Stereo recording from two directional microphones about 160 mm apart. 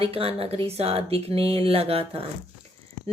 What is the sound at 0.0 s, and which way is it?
A woman's voice, 35° right (ahead or behind).